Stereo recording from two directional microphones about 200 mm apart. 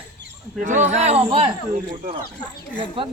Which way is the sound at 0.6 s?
35° right (ahead or behind).